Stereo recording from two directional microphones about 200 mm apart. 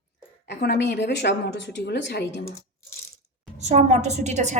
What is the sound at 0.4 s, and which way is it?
A woman's voice, 55° left (ahead or behind).